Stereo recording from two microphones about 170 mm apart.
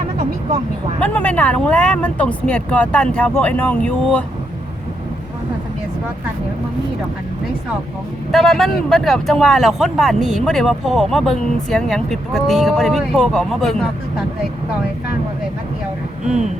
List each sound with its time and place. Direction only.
0.9 s speech: 10° left (ahead or behind)
8.3 s speech: centre (ahead or behind)